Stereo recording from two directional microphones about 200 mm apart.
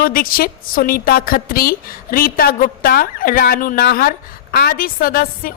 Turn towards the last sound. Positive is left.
turn(degrees=45)  # may be behind; listen again after turning